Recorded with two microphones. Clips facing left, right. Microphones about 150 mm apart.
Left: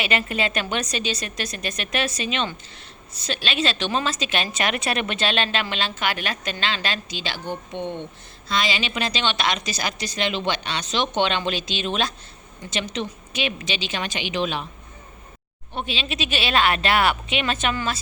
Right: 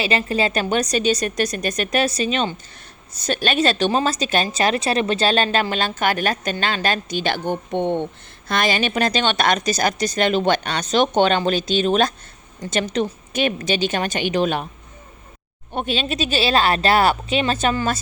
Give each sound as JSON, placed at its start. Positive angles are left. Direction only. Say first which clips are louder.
{"t": 0.0, "sound": "a woman's voice", "louder": "right 4 dB", "side_deg": -35}
{"t": 15.7, "sound": "a woman's voice", "louder": "right 6 dB", "side_deg": -50}